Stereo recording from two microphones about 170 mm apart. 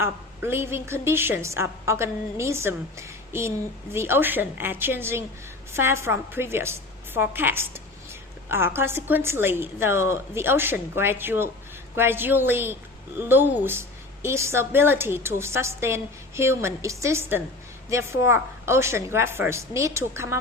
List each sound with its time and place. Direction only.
0.0 s a woman's voice: 15° right (ahead or behind)